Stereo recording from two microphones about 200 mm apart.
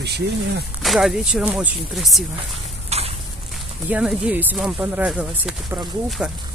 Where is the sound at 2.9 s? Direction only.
30° right (ahead or behind).